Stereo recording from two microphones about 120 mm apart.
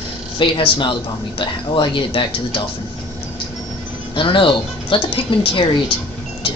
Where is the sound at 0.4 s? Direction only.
45° left (ahead or behind).